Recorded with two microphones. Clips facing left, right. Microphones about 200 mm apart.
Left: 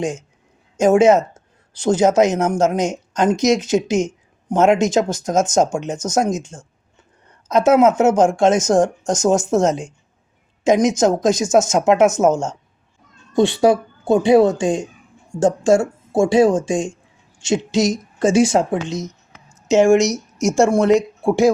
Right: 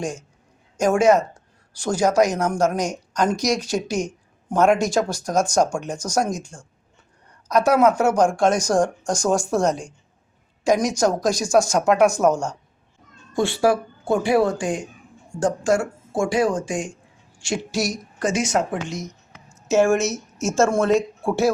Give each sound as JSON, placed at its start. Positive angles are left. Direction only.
{"t": 0.0, "sound": "speech", "side_deg": 20}